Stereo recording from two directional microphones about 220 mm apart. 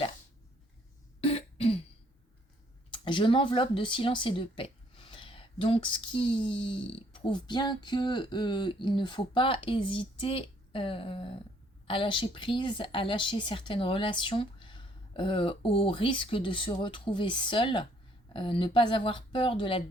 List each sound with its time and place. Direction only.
1.2 s cough: 25° left (ahead or behind)
2.9 s speech: 20° left (ahead or behind)